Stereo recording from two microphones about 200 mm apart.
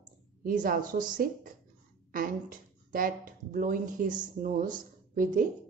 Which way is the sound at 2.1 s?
45° right (ahead or behind).